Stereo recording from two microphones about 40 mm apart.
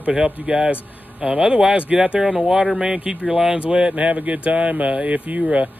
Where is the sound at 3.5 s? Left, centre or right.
Right.